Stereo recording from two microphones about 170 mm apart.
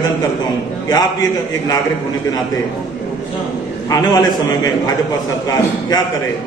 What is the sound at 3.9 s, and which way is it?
Speech, 20° left (ahead or behind).